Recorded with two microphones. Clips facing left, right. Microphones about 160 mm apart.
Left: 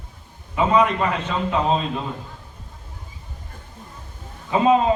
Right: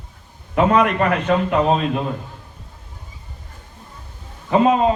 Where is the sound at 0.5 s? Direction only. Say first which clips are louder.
Right 2 dB; 65° right (ahead or behind).